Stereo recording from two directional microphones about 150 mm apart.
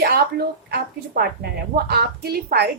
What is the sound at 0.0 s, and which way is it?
Speech, 90° right.